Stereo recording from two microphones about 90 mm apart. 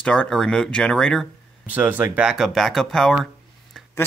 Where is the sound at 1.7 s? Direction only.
20° right (ahead or behind).